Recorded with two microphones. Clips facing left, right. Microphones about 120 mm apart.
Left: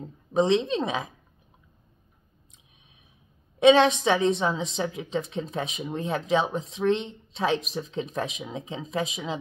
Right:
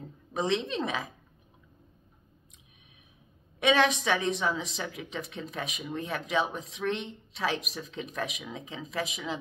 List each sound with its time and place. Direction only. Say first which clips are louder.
0.3 s a woman's voice: left 7 dB; 25° left (ahead or behind)
3.5 s a woman's voice: left 7 dB; 25° left (ahead or behind)